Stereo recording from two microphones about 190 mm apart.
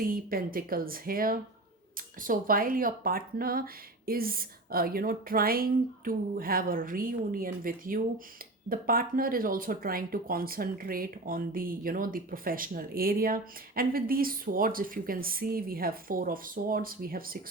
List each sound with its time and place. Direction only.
0.0 s speech: 50° right (ahead or behind)